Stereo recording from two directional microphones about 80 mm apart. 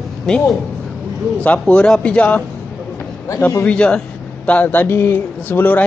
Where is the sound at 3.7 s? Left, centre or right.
Centre.